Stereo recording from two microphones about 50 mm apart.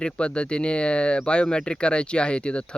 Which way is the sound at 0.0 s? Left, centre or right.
Left.